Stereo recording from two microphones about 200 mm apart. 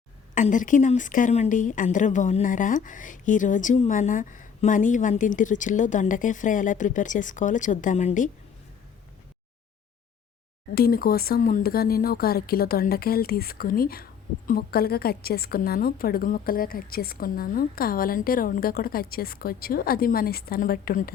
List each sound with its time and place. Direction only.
0.3 s a woman's voice: 40° left (ahead or behind)
10.8 s speech: 50° left (ahead or behind)